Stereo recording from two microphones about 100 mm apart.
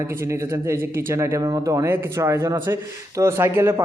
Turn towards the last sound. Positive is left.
turn(degrees=-20)  # may be behind; listen again after turning